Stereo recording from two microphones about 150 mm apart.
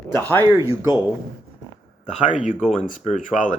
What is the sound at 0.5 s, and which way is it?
Speech, 15° right (ahead or behind).